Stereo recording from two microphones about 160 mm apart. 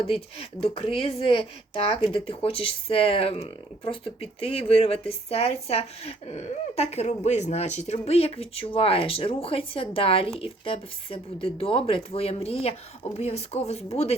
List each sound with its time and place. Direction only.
0.0 s speech: 35° left (ahead or behind)